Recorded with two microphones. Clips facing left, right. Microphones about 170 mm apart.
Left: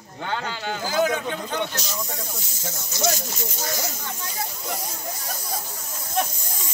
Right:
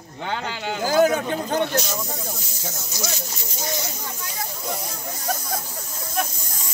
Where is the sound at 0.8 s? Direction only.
45° right (ahead or behind).